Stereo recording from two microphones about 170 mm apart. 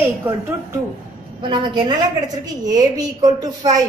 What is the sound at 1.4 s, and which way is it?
A woman's voice, 25° right (ahead or behind).